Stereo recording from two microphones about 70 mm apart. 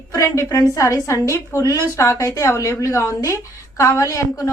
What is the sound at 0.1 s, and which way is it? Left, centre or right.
Speech, left.